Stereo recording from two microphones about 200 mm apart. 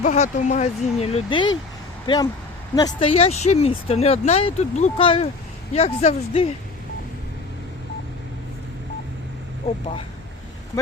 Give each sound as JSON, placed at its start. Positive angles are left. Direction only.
{"t": 0.0, "sound": "speech", "side_deg": 35}